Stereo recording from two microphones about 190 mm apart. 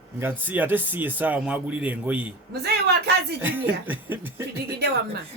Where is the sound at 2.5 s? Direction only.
60° right (ahead or behind).